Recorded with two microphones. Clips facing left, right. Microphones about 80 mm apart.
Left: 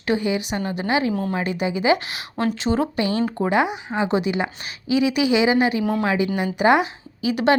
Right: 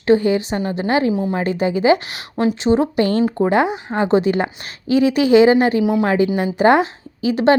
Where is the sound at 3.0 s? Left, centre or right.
Right.